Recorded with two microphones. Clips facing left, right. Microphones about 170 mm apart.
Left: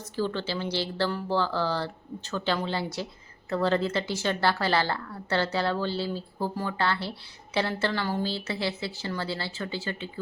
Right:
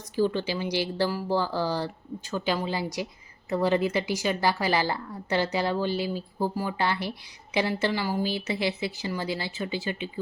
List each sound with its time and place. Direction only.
0.2 s a woman's voice: 15° right (ahead or behind)